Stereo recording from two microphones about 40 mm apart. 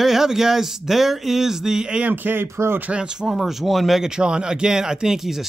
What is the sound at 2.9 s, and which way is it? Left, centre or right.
Speech, right.